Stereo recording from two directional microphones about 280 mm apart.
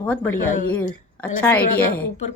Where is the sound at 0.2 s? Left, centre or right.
Centre.